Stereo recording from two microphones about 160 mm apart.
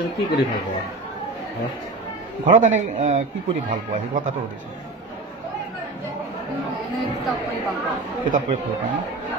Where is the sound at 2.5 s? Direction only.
50° right (ahead or behind).